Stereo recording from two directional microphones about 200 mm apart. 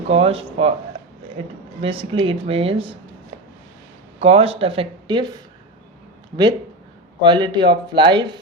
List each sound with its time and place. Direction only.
0.1 s speech: 30° right (ahead or behind)
4.2 s speech: 30° right (ahead or behind)
7.2 s speech: 25° right (ahead or behind)